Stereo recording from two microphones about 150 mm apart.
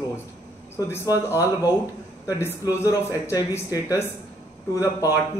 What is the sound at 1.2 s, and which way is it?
Speech, 20° left (ahead or behind).